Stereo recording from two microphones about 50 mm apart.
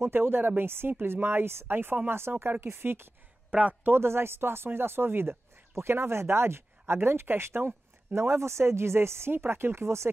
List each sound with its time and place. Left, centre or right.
0.0 s speech: right
3.4 s speech: right
3.8 s speech: right
9.8 s speech: right